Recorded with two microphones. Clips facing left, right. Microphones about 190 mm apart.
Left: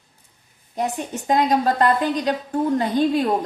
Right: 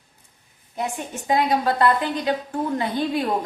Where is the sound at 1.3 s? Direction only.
40° left (ahead or behind).